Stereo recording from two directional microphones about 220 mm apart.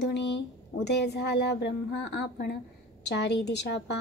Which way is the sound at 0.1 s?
50° left (ahead or behind).